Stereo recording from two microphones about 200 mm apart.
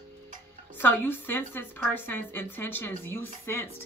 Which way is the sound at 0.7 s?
10° left (ahead or behind).